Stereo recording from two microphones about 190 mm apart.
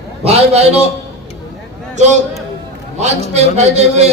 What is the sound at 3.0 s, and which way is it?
Speech, 35° right (ahead or behind).